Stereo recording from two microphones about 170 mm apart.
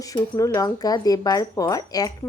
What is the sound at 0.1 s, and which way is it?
Speech, 20° left (ahead or behind).